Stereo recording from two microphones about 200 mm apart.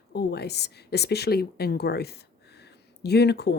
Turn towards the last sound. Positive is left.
turn(degrees=55)  # may be behind; listen again after turning